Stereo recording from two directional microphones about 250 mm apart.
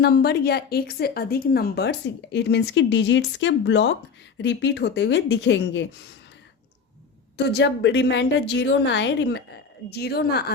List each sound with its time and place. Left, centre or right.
0.0 s a woman's voice: left
7.3 s a woman's voice: left